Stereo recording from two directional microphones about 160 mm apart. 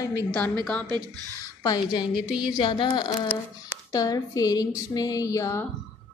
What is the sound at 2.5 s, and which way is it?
Speech, 30° left (ahead or behind).